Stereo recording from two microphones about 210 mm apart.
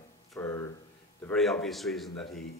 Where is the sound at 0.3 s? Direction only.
15° left (ahead or behind).